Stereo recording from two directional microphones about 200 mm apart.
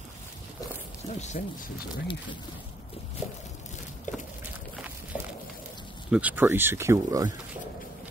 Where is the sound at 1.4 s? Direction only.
40° left (ahead or behind).